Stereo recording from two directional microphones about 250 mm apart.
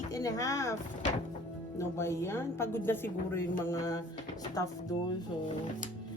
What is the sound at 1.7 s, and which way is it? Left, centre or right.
Speech, centre.